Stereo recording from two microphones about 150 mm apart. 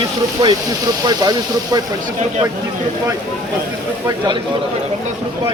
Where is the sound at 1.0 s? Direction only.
25° right (ahead or behind).